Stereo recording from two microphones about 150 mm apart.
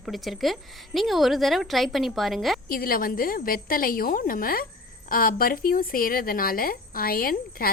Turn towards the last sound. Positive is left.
turn(degrees=75)  # may be behind; listen again after turning